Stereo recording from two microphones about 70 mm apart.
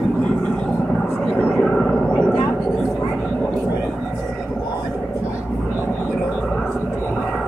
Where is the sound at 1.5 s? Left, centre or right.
Centre.